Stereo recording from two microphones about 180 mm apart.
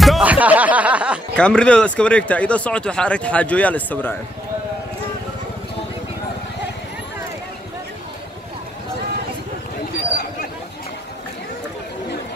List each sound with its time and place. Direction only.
0.0 s snicker: 5° right (ahead or behind)
1.3 s speech: 5° left (ahead or behind)